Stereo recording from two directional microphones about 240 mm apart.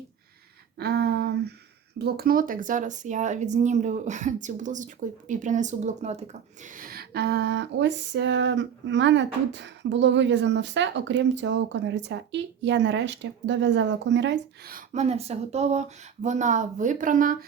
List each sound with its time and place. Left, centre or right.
0.8 s speech: right